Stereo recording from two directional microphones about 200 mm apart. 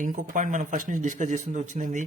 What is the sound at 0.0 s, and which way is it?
Speech, 40° right (ahead or behind).